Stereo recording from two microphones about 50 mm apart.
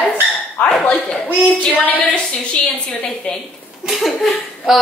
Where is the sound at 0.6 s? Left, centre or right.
Left.